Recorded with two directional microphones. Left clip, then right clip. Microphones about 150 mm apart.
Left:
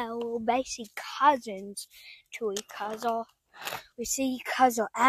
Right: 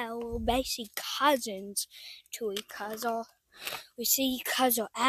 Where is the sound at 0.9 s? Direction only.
25° right (ahead or behind); by 4.3 s 5° right (ahead or behind).